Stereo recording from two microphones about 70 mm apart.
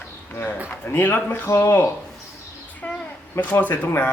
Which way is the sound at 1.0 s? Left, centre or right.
Left.